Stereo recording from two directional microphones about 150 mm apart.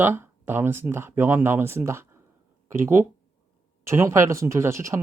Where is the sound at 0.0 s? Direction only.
15° right (ahead or behind).